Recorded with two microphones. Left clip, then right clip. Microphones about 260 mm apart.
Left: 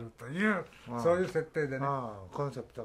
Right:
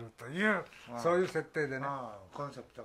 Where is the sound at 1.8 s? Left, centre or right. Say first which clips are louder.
Left 4 dB; left.